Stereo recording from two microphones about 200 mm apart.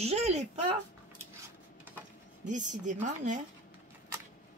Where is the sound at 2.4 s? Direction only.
40° right (ahead or behind).